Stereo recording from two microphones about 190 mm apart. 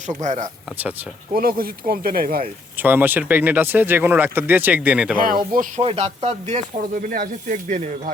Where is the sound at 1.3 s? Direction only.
50° right (ahead or behind).